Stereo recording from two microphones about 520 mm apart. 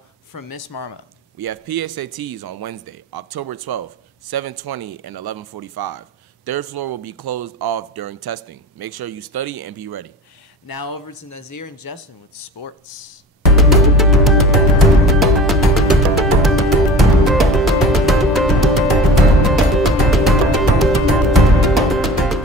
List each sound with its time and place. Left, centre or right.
0.3 s speech: left
1.4 s speech: right
10.7 s speech: left
13.5 s music: centre